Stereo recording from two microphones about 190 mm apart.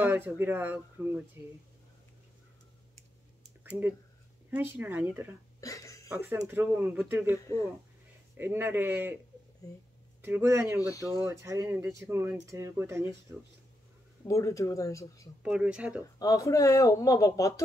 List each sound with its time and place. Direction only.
0.0 s speech: 10° right (ahead or behind)
4.5 s speech: 10° right (ahead or behind)
5.6 s a sound: 15° left (ahead or behind)
6.0 s speech: 15° right (ahead or behind)
8.4 s speech: 10° right (ahead or behind)
10.2 s speech: 10° right (ahead or behind)
14.2 s speech: 15° left (ahead or behind)
15.4 s speech: 5° right (ahead or behind)
16.0 s speech: 15° left (ahead or behind)